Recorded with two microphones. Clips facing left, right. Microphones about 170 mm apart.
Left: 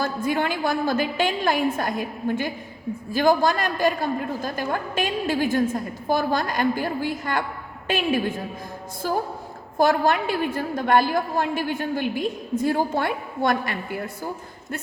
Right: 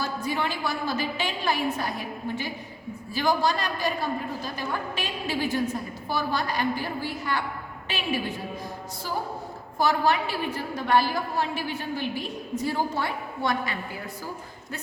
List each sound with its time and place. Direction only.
0.0 s a woman's voice: 50° left (ahead or behind)
9.7 s a woman's voice: 50° left (ahead or behind)